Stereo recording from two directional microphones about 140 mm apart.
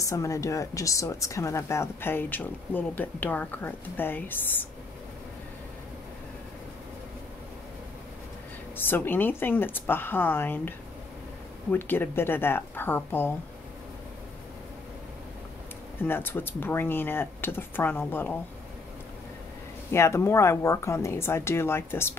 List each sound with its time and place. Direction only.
0.1 s a woman's voice: 20° left (ahead or behind)
8.7 s a woman's voice: 15° left (ahead or behind)
11.7 s a woman's voice: 15° left (ahead or behind)
16.0 s a woman's voice: 15° left (ahead or behind)
19.9 s speech: 20° left (ahead or behind)